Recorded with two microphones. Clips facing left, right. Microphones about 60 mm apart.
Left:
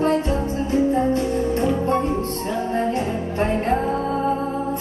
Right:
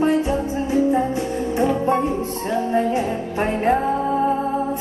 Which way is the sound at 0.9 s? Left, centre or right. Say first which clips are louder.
Left 1 dB; centre.